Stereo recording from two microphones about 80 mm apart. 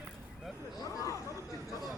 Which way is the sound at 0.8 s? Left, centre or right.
Left.